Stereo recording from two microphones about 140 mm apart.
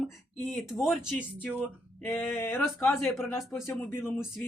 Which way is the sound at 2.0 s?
10° left (ahead or behind).